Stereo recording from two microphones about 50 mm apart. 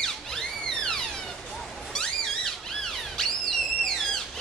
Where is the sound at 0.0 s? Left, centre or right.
Centre.